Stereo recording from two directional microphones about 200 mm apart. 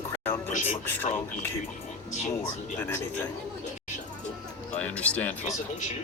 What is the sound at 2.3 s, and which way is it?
Speech, 10° left (ahead or behind).